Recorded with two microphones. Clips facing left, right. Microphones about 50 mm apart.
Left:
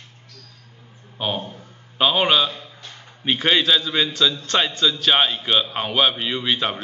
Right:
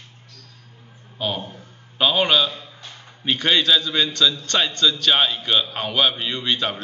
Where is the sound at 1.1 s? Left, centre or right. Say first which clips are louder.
Left 1 dB; centre.